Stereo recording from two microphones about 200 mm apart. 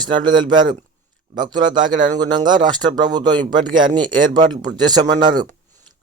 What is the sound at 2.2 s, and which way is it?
A man's voice, 20° right (ahead or behind).